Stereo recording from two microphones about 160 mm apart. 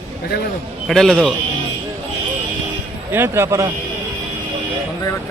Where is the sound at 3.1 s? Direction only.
15° right (ahead or behind).